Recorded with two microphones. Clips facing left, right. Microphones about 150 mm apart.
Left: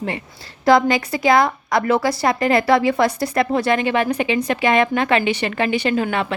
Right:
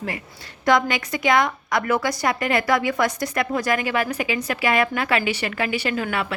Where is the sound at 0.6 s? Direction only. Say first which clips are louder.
Left 5 dB; 35° left (ahead or behind).